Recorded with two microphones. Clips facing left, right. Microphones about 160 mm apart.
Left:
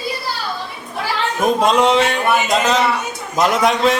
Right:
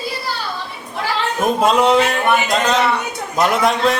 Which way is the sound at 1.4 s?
Centre (ahead or behind).